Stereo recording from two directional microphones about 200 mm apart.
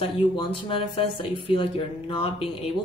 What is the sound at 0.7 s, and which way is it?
Speech, 25° left (ahead or behind).